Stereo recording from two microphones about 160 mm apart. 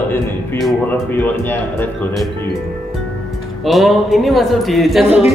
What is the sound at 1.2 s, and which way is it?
Speech, 10° left (ahead or behind).